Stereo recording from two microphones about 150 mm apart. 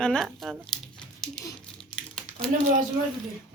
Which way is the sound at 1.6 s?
5° left (ahead or behind).